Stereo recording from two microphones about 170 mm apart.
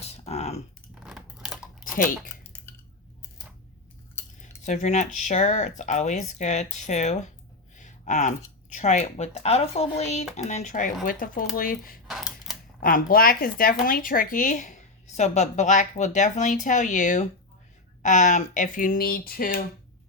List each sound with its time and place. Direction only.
0.0 s typing: 40° left (ahead or behind)
1.0 s scissors: 5° right (ahead or behind)
4.6 s a woman's voice: 45° left (ahead or behind)
7.8 s a sound: 45° left (ahead or behind)
8.7 s a woman's voice: 45° left (ahead or behind)
12.0 s a sound: centre (ahead or behind)
12.8 s a woman's voice: 55° left (ahead or behind)